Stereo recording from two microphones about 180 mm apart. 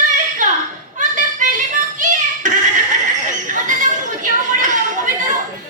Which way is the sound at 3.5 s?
45° right (ahead or behind).